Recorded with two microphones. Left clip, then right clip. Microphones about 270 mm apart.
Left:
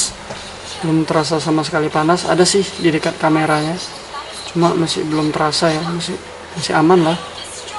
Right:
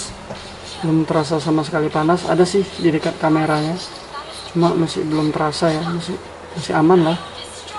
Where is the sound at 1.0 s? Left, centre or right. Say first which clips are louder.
Left 2 dB; centre.